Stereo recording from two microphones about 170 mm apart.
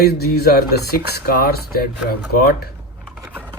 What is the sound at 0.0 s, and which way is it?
Speech, 70° left (ahead or behind).